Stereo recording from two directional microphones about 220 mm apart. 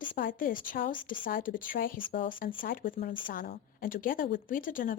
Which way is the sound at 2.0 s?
25° left (ahead or behind).